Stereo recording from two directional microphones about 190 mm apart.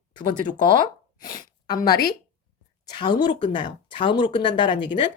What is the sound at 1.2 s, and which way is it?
Speech, 20° left (ahead or behind).